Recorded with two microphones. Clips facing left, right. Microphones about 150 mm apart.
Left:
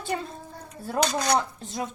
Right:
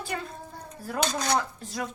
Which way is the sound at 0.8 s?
25° left (ahead or behind).